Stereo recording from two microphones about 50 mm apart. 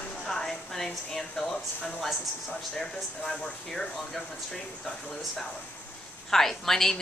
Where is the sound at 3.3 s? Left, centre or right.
Centre.